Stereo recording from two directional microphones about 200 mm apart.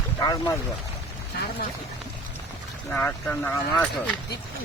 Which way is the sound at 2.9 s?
10° left (ahead or behind).